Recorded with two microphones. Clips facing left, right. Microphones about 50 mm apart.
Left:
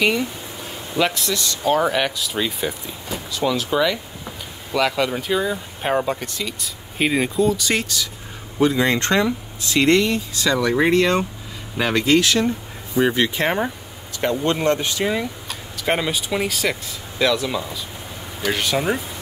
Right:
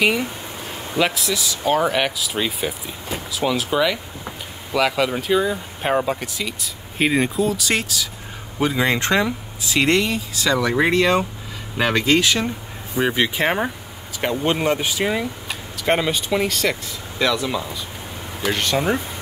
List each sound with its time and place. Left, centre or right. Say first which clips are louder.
0.9 s speech: even; centre
8.5 s speech: left 2 dB; centre